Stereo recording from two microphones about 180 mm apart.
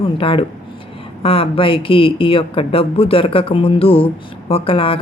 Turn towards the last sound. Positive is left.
turn(degrees=30)  # may be behind; listen again after turning